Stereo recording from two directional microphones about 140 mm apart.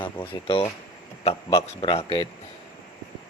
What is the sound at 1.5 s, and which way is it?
Speech, 40° left (ahead or behind).